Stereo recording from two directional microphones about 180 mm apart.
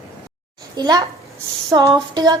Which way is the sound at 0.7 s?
20° right (ahead or behind).